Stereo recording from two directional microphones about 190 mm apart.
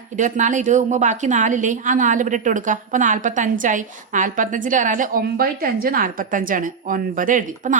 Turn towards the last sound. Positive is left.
turn(degrees=-45)  # may be behind; listen again after turning